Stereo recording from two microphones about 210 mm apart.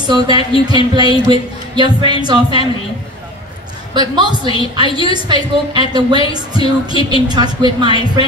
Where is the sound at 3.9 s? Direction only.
20° right (ahead or behind).